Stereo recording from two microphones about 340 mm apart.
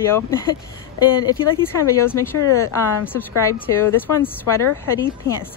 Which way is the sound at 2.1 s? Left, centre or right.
Centre.